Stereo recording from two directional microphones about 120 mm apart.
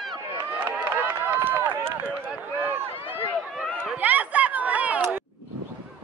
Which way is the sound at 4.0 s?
15° right (ahead or behind).